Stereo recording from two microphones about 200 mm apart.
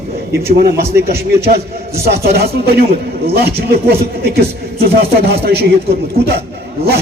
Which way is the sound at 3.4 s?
50° right (ahead or behind).